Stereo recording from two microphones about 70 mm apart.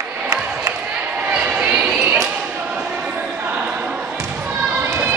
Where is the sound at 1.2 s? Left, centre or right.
Centre.